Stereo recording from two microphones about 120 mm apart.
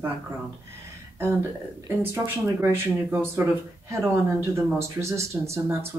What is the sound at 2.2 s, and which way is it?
Speech, 15° right (ahead or behind).